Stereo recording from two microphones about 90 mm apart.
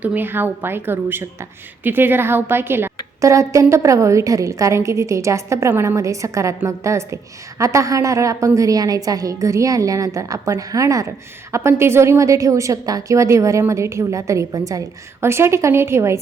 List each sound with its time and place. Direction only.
0.0 s a woman's voice: 20° right (ahead or behind)
3.2 s a woman's voice: 35° right (ahead or behind)